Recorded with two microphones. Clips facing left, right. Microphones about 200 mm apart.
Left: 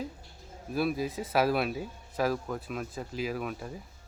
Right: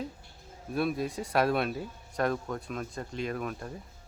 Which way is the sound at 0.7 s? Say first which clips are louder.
Even; centre (ahead or behind).